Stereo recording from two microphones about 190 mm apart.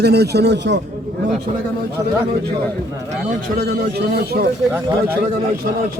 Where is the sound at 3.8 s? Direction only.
55° right (ahead or behind).